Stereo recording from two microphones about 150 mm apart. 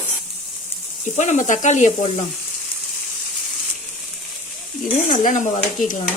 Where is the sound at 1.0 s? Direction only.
55° left (ahead or behind).